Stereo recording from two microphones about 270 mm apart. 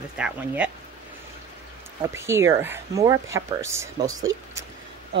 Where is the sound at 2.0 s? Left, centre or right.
Centre.